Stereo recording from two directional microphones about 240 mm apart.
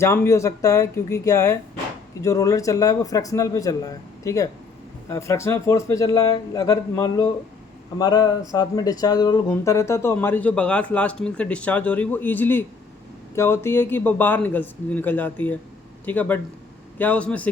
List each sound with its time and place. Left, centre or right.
0.0 s a man's voice: centre